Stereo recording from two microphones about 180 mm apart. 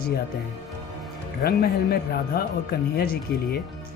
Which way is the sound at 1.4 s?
60° left (ahead or behind).